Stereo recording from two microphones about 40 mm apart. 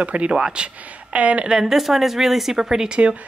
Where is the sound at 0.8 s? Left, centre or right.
Right.